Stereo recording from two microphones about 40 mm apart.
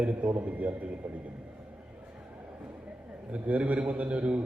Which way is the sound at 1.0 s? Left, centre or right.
Right.